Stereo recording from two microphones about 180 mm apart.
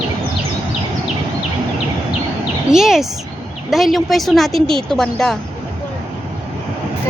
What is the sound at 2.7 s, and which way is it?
A woman's voice, centre (ahead or behind).